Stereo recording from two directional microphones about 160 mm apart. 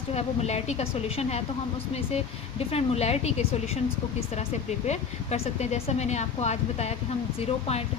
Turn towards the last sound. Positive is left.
turn(degrees=40)  # may be behind; listen again after turning